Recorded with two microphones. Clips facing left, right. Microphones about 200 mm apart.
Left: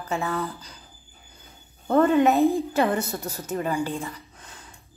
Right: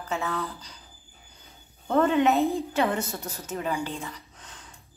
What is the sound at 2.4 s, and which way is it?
Speech, 10° left (ahead or behind).